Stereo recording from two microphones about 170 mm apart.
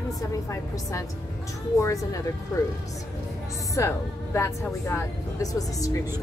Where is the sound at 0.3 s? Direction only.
20° left (ahead or behind).